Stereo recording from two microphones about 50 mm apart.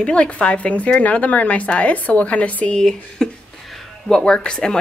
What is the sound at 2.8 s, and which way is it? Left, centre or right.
Speech, centre.